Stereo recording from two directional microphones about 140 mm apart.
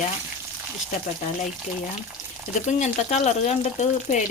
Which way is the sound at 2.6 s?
55° left (ahead or behind).